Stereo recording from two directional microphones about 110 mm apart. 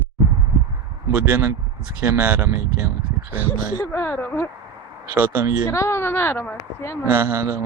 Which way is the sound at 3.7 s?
20° left (ahead or behind).